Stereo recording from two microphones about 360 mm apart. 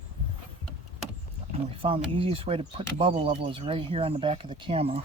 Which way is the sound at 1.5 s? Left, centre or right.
Centre.